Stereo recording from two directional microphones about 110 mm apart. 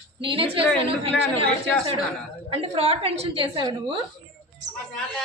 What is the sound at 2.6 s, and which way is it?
A woman's voice, 65° right (ahead or behind).